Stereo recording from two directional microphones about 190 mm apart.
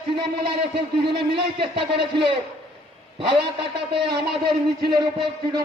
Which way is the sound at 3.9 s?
60° right (ahead or behind).